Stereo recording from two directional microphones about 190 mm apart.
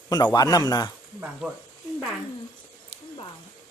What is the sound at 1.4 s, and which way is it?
Speech, 5° right (ahead or behind).